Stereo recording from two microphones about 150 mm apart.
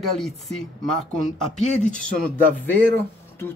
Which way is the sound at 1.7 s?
50° left (ahead or behind).